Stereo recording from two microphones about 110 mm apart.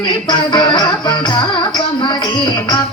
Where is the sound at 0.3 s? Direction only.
45° left (ahead or behind).